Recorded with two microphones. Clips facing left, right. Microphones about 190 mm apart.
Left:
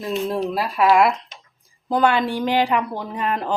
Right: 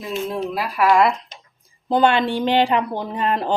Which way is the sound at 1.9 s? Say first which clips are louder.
Right 2 dB; 25° right (ahead or behind).